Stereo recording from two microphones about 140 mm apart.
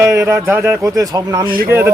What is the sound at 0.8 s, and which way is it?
Speech, 25° right (ahead or behind).